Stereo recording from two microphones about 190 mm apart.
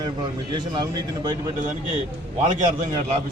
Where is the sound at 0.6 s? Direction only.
25° right (ahead or behind).